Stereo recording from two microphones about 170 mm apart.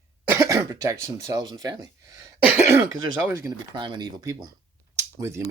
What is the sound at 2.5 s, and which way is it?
Speech, 15° right (ahead or behind).